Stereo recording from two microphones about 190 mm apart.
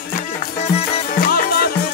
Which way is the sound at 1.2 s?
50° left (ahead or behind).